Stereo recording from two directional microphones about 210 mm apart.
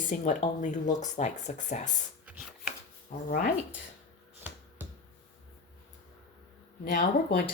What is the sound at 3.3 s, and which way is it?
Speech, 40° left (ahead or behind).